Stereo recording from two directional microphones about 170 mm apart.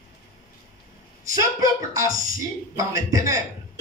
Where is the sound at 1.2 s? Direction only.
20° right (ahead or behind).